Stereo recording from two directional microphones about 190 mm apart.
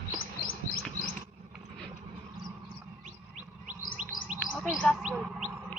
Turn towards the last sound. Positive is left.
turn(degrees=0)  # may be behind; listen again after turning